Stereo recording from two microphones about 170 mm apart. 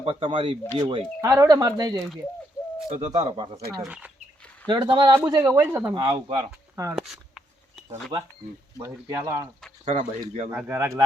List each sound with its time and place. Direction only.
0.0 s speech: 30° right (ahead or behind)
1.2 s speech: 20° right (ahead or behind)
2.9 s speech: 40° right (ahead or behind)
3.8 s speech: 5° right (ahead or behind)
4.7 s speech: 25° right (ahead or behind); by 5.9 s 10° right (ahead or behind)
5.9 s speech: 30° right (ahead or behind)
6.9 s a sound: centre (ahead or behind)
8.8 s speech: 20° right (ahead or behind)
9.8 s speech: 45° right (ahead or behind)
10.5 s speech: 15° right (ahead or behind)